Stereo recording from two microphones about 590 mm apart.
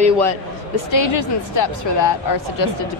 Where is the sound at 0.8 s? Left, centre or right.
Left.